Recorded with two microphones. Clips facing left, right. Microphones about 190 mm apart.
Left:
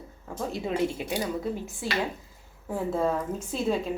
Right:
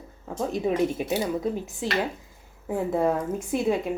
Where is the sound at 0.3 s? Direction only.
20° right (ahead or behind).